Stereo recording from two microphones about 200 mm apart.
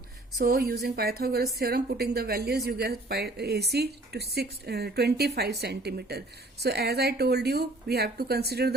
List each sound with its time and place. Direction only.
0.3 s a woman's voice: 50° right (ahead or behind)